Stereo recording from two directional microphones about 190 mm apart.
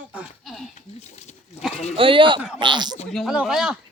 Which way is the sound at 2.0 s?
25° right (ahead or behind).